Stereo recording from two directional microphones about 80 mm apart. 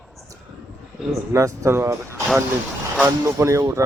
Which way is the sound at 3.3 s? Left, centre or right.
Right.